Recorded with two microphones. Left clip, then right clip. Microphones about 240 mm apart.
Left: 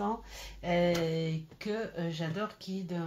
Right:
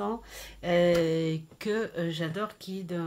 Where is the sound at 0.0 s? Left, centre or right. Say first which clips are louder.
Right 1 dB; right.